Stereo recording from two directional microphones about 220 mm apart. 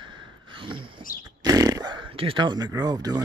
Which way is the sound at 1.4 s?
15° right (ahead or behind).